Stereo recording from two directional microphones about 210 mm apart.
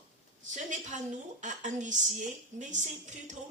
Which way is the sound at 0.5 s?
35° right (ahead or behind).